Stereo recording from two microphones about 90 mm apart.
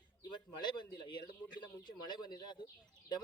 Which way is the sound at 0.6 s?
55° left (ahead or behind).